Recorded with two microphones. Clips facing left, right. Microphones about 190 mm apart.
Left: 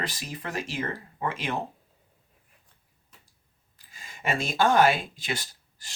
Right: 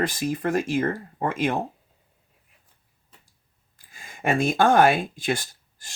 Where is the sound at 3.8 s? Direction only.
50° right (ahead or behind).